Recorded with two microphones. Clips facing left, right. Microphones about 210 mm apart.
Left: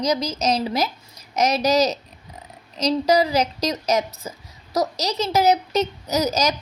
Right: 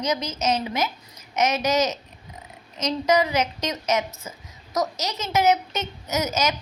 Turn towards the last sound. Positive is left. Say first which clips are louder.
# left 3 dB
turn(degrees=35)  # may be behind; listen again after turning